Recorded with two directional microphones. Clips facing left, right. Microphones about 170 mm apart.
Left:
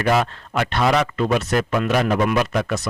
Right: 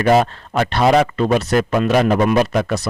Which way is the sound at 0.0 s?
40° right (ahead or behind).